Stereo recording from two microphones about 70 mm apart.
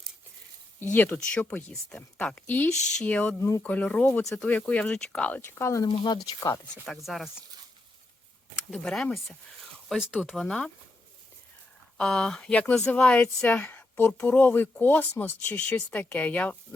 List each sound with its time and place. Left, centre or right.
0.8 s speech: left
5.3 s speech: left
5.6 s speech: left
6.1 s speech: left
6.8 s speech: centre
8.7 s speech: centre
10.2 s speech: centre
11.9 s speech: centre
12.5 s speech: centre